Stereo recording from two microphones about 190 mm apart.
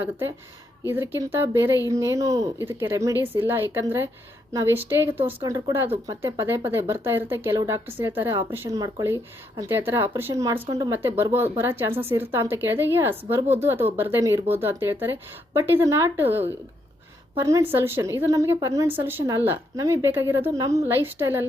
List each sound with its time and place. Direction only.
0.0 s a woman's voice: 10° right (ahead or behind)
7.9 s speech: 10° right (ahead or behind)